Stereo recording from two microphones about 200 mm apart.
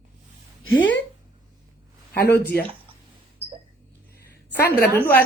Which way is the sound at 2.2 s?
50° left (ahead or behind).